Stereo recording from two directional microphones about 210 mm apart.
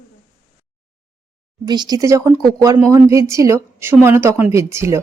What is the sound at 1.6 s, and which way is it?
Speech, 20° right (ahead or behind).